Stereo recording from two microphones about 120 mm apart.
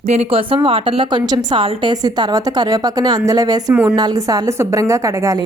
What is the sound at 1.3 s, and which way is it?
A woman's voice, 35° right (ahead or behind).